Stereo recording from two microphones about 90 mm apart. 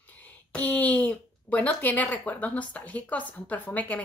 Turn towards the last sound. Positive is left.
turn(degrees=15)  # may be behind; listen again after turning